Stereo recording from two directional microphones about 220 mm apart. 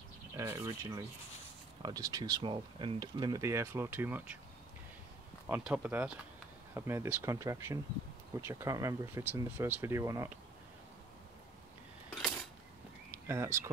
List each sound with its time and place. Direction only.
0.4 s speech: 15° right (ahead or behind)
5.5 s speech: 5° right (ahead or behind)
13.1 s speech: 10° right (ahead or behind)